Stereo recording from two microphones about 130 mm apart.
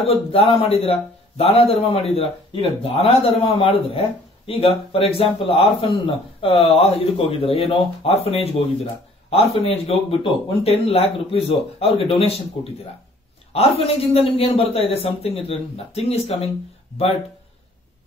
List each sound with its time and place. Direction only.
0.0 s a man's voice: 50° left (ahead or behind)